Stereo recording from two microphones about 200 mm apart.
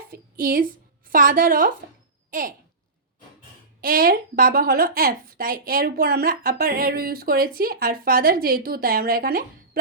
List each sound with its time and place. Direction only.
0.1 s a woman's voice: 45° right (ahead or behind)
3.8 s a woman's voice: 45° right (ahead or behind)